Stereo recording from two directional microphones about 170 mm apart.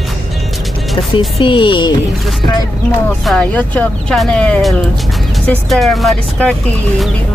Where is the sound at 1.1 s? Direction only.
30° left (ahead or behind).